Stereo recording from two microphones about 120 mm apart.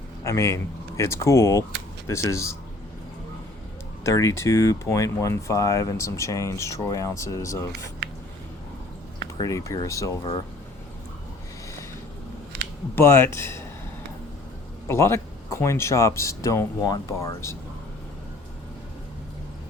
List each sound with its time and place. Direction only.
0.3 s speech: 25° left (ahead or behind)
4.0 s speech: 25° left (ahead or behind)
9.4 s speech: 30° left (ahead or behind)
13.0 s speech: 20° left (ahead or behind)
14.8 s speech: 20° left (ahead or behind)